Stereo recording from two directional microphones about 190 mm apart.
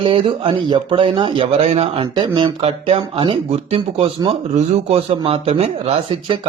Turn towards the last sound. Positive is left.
turn(degrees=-30)  # may be behind; listen again after turning